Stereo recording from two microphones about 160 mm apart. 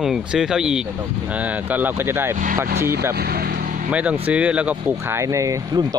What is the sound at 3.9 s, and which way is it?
Speech, 10° right (ahead or behind).